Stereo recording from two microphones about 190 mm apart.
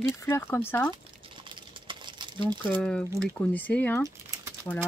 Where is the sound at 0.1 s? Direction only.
10° left (ahead or behind).